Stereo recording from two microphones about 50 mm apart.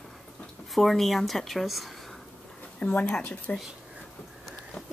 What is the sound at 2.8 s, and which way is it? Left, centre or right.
Speech, left.